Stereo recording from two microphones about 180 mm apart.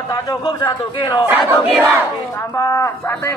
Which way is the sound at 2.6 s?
15° left (ahead or behind).